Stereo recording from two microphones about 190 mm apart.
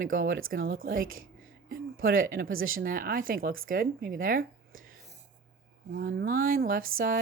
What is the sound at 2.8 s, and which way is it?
Speech, 50° right (ahead or behind).